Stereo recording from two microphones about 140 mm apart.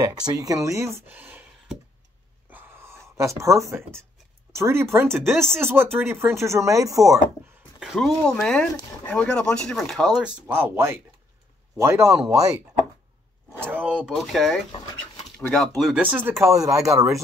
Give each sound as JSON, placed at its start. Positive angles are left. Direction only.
{"t": 0.0, "sound": "speech", "side_deg": -25}
{"t": 2.5, "sound": "gasp", "side_deg": -15}
{"t": 4.5, "sound": "speech", "side_deg": -20}
{"t": 7.8, "sound": "speech", "side_deg": 0}
{"t": 13.5, "sound": "a sound", "side_deg": -10}
{"t": 15.2, "sound": "speech", "side_deg": 5}